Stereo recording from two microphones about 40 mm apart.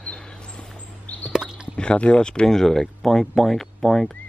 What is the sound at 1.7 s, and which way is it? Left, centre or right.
Speech, left.